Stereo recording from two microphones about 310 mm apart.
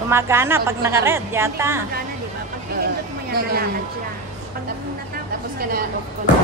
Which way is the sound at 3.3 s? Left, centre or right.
Right.